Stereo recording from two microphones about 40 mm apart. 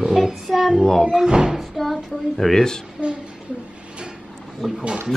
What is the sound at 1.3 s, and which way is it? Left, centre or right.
Child singing, centre.